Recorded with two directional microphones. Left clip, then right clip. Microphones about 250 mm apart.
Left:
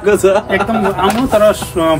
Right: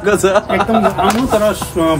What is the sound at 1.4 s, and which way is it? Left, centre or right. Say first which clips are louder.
Speech: left 3 dB; centre.